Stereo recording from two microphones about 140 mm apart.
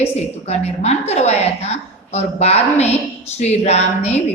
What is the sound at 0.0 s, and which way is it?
A woman's voice, 50° left (ahead or behind).